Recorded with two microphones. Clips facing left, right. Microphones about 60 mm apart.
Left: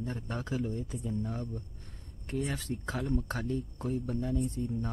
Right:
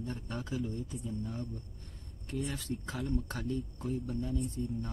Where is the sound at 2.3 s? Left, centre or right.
Left.